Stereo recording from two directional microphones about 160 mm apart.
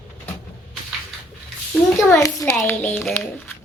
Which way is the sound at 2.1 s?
20° left (ahead or behind).